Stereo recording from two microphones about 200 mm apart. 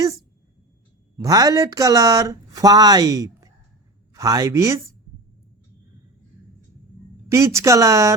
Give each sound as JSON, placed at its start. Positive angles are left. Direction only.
{"t": 1.1, "sound": "speech", "side_deg": -15}
{"t": 7.3, "sound": "speech", "side_deg": -15}